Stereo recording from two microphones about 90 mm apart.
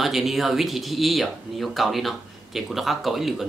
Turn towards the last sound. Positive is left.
turn(degrees=0)  # may be behind; listen again after turning